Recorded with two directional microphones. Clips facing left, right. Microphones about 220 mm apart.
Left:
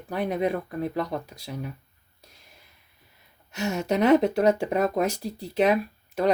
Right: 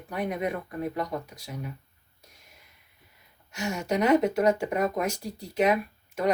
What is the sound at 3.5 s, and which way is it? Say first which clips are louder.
Speech: left 3 dB; 35° left (ahead or behind).